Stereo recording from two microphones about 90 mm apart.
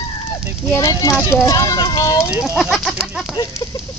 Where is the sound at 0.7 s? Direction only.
30° left (ahead or behind).